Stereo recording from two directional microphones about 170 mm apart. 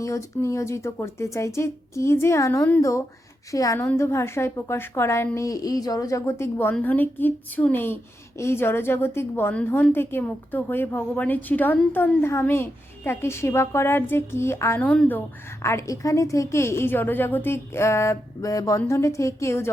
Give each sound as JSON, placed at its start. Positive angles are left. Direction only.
{"t": 0.0, "sound": "a woman's voice", "side_deg": 20}